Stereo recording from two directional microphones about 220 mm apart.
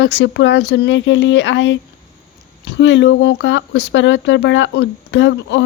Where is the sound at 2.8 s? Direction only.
55° left (ahead or behind).